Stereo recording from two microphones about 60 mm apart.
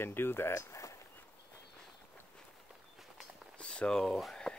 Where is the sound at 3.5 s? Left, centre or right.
Centre.